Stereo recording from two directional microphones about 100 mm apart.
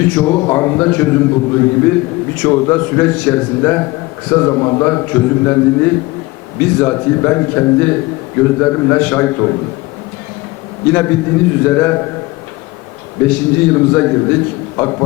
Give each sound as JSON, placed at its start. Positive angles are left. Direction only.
{"t": 0.0, "sound": "a man's voice", "side_deg": 15}
{"t": 10.9, "sound": "a man's voice", "side_deg": 20}
{"t": 13.2, "sound": "a man's voice", "side_deg": 15}